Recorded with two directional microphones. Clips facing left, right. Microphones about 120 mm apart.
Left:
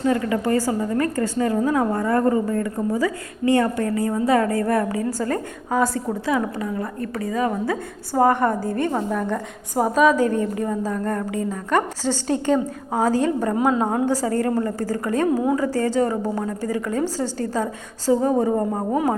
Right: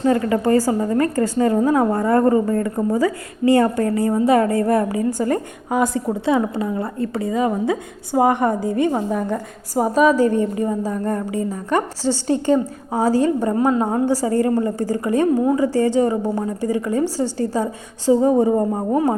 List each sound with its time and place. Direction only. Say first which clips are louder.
0.0 s a woman's voice: right 3 dB; 35° right (ahead or behind); by 18.6 s 15° right (ahead or behind)